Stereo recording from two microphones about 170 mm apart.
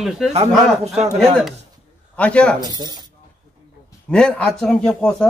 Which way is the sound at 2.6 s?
25° right (ahead or behind).